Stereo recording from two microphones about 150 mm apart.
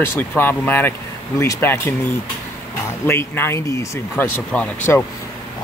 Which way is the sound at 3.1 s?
15° left (ahead or behind).